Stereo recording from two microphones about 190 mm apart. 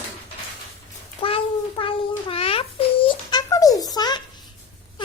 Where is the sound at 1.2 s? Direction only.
30° left (ahead or behind).